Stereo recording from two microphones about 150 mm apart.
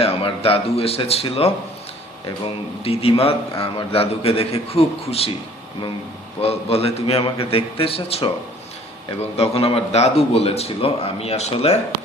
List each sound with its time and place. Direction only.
0.0 s a man's voice: 40° left (ahead or behind)
6.4 s a man's voice: 45° left (ahead or behind)